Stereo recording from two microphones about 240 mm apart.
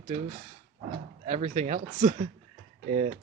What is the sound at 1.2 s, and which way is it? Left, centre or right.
Speech, right.